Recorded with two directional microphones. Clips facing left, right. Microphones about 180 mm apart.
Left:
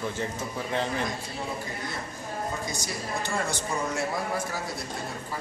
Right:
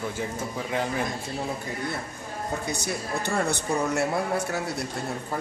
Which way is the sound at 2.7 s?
65° right (ahead or behind).